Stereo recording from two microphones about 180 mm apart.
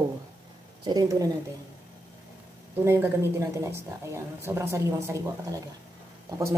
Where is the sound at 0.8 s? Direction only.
20° right (ahead or behind).